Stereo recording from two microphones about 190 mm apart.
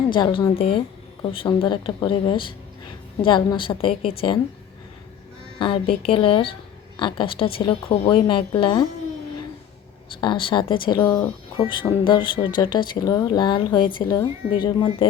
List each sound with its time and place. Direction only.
0.1 s speech: 25° left (ahead or behind)
5.5 s a woman's voice: 25° left (ahead or behind)
10.2 s speech: 25° left (ahead or behind)